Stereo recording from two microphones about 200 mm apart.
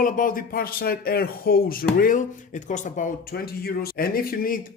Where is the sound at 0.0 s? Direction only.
45° left (ahead or behind).